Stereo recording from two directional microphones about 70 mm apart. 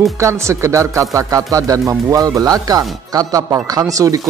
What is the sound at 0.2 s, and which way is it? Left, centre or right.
Speech, right.